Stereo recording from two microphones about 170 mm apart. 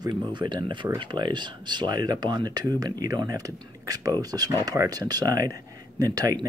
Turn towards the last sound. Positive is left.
turn(degrees=-20)  # may be behind; listen again after turning